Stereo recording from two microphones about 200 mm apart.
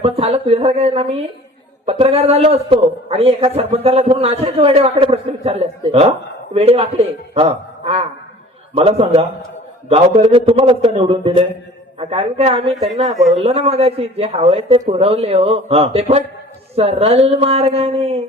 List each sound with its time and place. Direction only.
0.0 s a man's voice: 30° right (ahead or behind)
12.7 s speech: centre (ahead or behind)
13.3 s a man's voice: 30° right (ahead or behind)